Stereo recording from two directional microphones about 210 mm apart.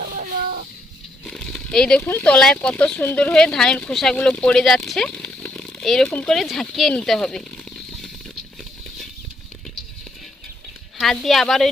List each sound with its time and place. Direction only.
1.2 s speech: centre (ahead or behind)
11.0 s speech: centre (ahead or behind)